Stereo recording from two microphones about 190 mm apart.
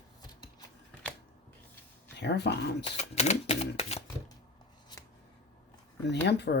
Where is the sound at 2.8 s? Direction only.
35° left (ahead or behind).